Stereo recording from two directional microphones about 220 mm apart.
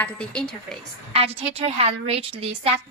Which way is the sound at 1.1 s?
25° right (ahead or behind).